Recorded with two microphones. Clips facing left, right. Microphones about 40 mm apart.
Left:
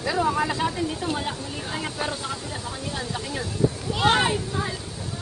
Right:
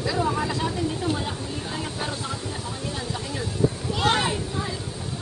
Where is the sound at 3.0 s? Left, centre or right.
Centre.